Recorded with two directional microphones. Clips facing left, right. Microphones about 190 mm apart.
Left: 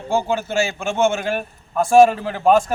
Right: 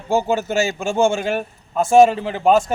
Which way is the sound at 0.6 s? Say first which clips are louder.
Even; 35° right (ahead or behind).